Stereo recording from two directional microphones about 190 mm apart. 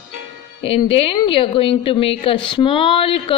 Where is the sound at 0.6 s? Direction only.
30° left (ahead or behind).